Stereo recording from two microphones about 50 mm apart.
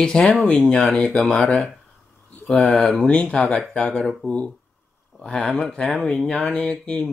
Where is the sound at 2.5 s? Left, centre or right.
Centre.